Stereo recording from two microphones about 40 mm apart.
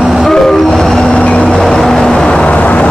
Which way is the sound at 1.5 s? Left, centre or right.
Centre.